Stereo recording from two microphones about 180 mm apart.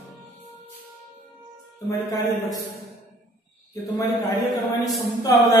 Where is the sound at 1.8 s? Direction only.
15° left (ahead or behind).